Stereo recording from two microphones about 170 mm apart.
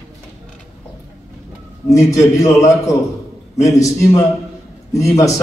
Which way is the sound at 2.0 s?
20° left (ahead or behind).